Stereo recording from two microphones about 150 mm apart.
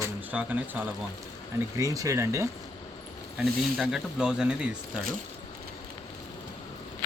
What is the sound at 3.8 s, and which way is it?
Speech, 5° right (ahead or behind).